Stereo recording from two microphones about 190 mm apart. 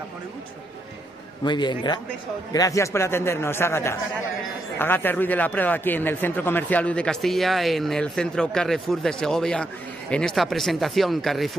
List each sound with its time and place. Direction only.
1.4 s a man's voice: 25° left (ahead or behind); by 11.5 s centre (ahead or behind)